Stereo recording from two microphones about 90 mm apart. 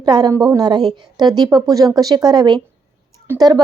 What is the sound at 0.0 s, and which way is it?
Speech, 50° right (ahead or behind).